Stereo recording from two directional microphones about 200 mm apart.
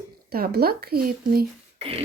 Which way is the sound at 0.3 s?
50° right (ahead or behind).